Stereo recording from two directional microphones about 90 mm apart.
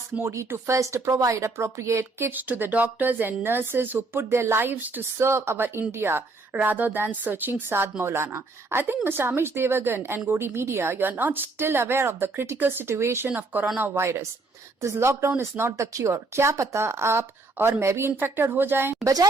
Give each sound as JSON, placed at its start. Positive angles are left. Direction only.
{"t": 0.2, "sound": "speech", "side_deg": -30}
{"t": 19.0, "sound": "a woman's voice", "side_deg": -45}